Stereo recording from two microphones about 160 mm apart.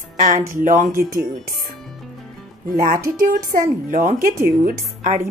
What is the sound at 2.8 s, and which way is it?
Speech, 65° right (ahead or behind).